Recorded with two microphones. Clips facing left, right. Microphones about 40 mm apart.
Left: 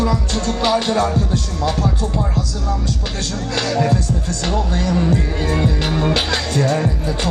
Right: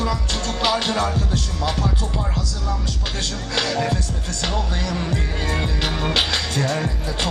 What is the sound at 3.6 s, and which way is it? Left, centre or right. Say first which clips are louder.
Music: left 5 dB; centre.